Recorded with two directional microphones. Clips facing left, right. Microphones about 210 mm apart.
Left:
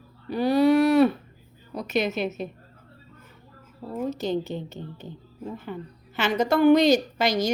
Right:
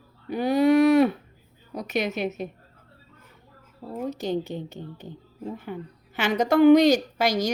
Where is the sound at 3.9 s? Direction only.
15° right (ahead or behind).